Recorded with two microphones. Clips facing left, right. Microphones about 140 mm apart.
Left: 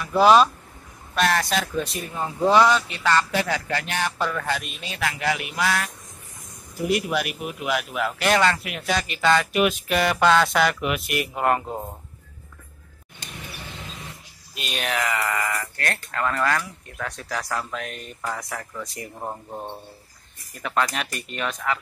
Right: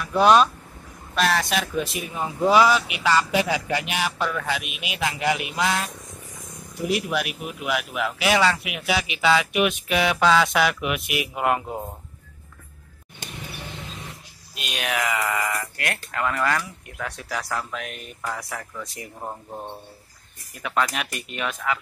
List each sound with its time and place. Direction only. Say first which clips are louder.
0.0 s speech: left 1 dB; centre (ahead or behind)
4.2 s speech: even; centre (ahead or behind); by 5.9 s 20° right (ahead or behind)
6.8 s speech: left 1 dB; centre (ahead or behind)
14.5 s speech: even; centre (ahead or behind)
19.1 s speech: left 1 dB; 10° left (ahead or behind)
20.6 s speech: even; 5° right (ahead or behind)